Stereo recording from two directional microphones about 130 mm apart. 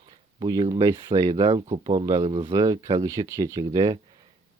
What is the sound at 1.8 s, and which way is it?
Speech, 40° right (ahead or behind).